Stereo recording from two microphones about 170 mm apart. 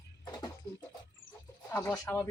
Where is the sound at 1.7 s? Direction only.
15° left (ahead or behind).